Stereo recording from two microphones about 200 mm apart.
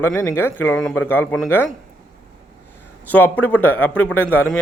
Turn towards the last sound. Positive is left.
turn(degrees=10)  # may be behind; listen again after turning